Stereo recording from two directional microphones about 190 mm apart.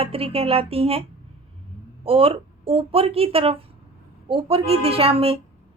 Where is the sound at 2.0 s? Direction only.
30° right (ahead or behind).